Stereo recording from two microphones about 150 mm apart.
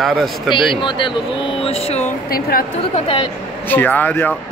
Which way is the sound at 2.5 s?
75° left (ahead or behind).